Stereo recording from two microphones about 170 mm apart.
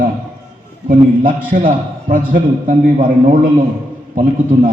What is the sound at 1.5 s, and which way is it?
A man's voice, 50° right (ahead or behind).